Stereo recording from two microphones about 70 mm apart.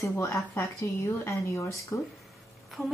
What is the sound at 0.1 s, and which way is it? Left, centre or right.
Speech, left.